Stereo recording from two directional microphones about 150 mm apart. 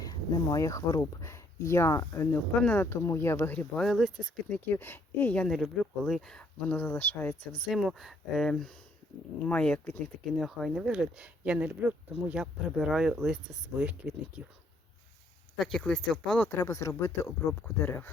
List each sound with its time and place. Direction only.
0.0 s speech: 25° left (ahead or behind)
3.8 s speech: centre (ahead or behind)
4.4 s speech: 10° left (ahead or behind)
7.7 s speech: centre (ahead or behind)
10.3 s speech: centre (ahead or behind)
15.5 s speech: 5° left (ahead or behind)
16.5 s speech: 20° left (ahead or behind)